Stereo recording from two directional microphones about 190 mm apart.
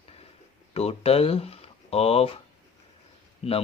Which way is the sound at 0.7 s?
30° left (ahead or behind).